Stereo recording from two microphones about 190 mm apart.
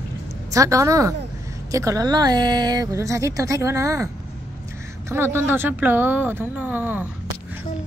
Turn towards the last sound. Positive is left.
turn(degrees=-10)  # may be behind; listen again after turning